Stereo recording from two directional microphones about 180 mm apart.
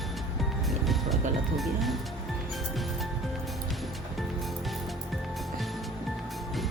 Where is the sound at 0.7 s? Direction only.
Centre (ahead or behind).